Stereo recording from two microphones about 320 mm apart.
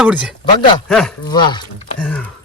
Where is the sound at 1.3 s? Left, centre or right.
Centre.